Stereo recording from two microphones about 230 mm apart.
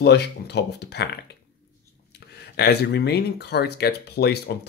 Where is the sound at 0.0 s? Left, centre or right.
Left.